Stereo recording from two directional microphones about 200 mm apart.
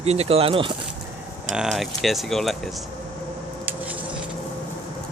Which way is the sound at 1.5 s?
Centre (ahead or behind).